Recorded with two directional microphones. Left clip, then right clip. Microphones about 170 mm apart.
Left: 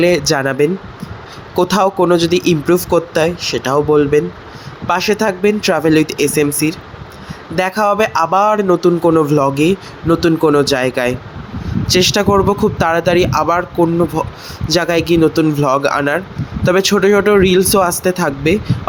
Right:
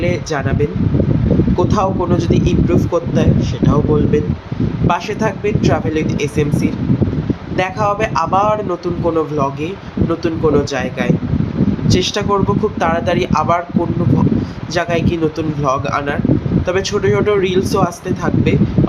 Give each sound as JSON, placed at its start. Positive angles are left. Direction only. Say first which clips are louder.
{"t": 0.0, "sound": "a man's voice", "louder": "left 6 dB", "side_deg": 50}
{"t": 14.7, "sound": "a man's voice", "louder": "left 4 dB", "side_deg": 45}